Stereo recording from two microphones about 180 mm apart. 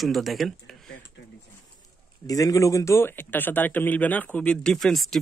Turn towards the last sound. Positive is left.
turn(degrees=0)  # may be behind; listen again after turning